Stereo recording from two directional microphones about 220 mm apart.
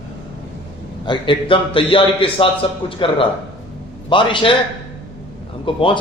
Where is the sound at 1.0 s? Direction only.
20° left (ahead or behind).